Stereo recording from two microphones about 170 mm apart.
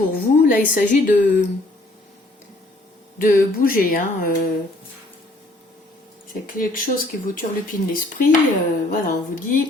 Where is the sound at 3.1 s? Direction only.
55° left (ahead or behind).